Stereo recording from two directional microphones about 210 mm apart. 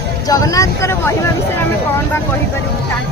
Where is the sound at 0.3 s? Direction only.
15° left (ahead or behind).